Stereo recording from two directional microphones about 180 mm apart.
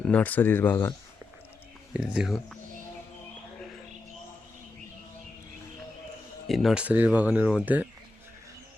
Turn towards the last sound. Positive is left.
turn(degrees=-10)  # may be behind; listen again after turning